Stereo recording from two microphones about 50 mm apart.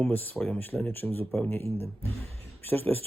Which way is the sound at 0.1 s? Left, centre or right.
Left.